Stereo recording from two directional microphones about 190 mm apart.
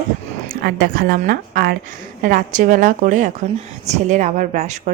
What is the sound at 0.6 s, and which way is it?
A woman's voice, 55° right (ahead or behind).